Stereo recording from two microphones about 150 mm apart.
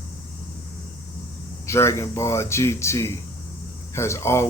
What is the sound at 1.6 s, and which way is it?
Speech, 20° left (ahead or behind).